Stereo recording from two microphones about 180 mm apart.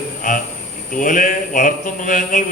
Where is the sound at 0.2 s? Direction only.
45° left (ahead or behind).